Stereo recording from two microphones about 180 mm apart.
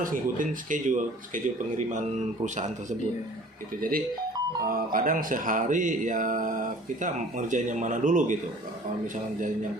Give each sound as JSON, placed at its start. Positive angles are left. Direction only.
{"t": 0.0, "sound": "speech", "side_deg": -50}
{"t": 3.8, "sound": "speech", "side_deg": -55}